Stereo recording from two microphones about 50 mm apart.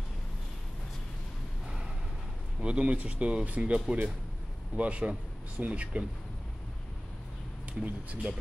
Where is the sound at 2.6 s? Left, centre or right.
Right.